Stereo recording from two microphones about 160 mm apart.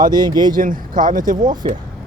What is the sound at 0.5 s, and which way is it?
Speech, 60° right (ahead or behind).